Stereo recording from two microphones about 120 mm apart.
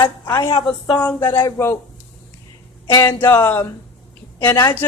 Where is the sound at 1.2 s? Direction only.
25° left (ahead or behind).